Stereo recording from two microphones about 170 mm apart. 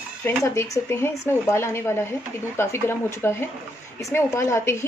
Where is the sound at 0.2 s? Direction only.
15° left (ahead or behind).